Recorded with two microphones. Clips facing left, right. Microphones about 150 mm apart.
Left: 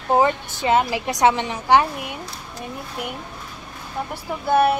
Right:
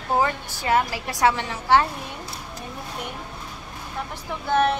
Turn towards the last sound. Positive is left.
turn(degrees=10)  # may be behind; listen again after turning